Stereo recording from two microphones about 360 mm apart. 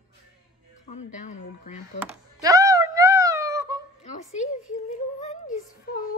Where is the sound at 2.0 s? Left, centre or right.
Centre.